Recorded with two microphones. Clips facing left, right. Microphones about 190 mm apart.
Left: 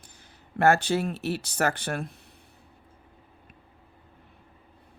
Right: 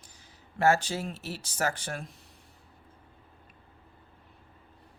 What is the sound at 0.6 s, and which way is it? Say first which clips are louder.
Speech: left 4 dB; 60° left (ahead or behind).